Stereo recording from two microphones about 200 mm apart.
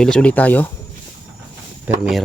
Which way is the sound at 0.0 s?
5° left (ahead or behind).